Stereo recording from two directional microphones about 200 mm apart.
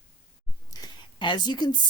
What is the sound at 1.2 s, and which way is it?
Speech, 25° left (ahead or behind).